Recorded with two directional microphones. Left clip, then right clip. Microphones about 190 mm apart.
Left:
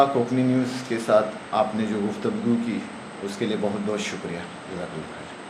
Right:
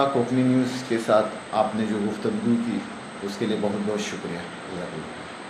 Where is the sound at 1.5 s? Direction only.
5° left (ahead or behind).